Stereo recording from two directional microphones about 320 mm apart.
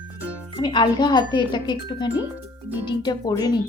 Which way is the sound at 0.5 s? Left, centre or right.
Centre.